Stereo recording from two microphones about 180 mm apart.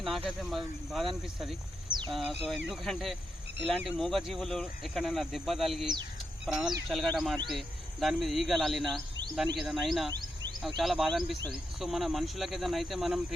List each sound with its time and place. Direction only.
0.3 s speech: centre (ahead or behind)
10.1 s insect: 20° right (ahead or behind)
10.8 s speech: centre (ahead or behind)